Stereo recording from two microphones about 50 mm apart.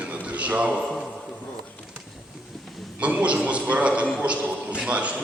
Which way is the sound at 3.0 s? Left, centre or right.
Right.